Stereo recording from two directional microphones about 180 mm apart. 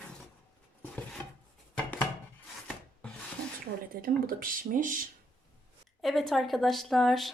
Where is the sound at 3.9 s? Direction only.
55° right (ahead or behind).